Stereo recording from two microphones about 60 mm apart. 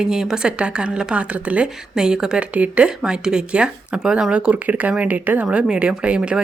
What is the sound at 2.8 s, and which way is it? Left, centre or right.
Speech, centre.